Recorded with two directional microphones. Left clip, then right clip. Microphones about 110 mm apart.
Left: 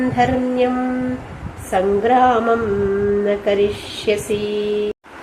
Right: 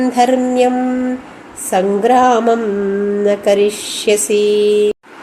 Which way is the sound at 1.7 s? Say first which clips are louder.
Right 3 dB; 60° right (ahead or behind).